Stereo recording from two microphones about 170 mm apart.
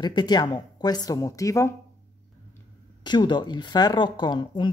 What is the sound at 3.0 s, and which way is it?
Speech, 25° left (ahead or behind).